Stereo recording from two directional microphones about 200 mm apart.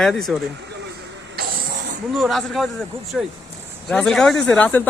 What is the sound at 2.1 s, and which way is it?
Speech, centre (ahead or behind).